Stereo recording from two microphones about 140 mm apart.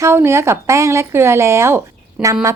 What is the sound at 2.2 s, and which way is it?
Speech, 5° right (ahead or behind).